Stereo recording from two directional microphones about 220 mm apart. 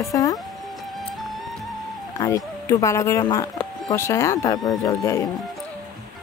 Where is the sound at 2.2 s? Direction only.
15° left (ahead or behind).